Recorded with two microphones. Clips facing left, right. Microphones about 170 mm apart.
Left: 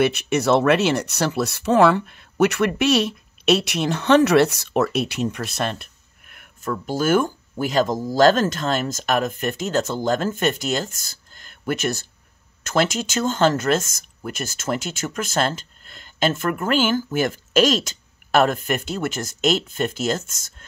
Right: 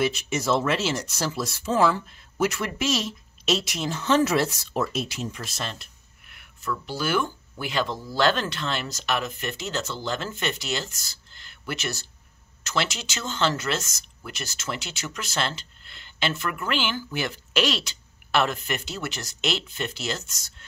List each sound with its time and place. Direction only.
0.0 s speech: 65° left (ahead or behind); by 20.6 s 50° left (ahead or behind)